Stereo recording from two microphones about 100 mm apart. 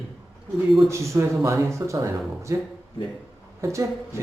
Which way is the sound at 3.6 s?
30° right (ahead or behind).